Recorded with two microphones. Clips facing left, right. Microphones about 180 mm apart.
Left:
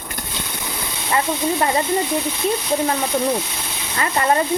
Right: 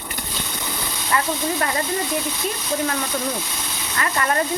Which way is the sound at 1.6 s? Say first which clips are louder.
Left 4 dB; 25° left (ahead or behind).